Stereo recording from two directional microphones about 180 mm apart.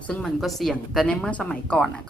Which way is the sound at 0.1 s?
Centre (ahead or behind).